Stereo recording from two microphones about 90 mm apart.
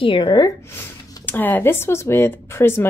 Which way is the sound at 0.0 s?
70° left (ahead or behind).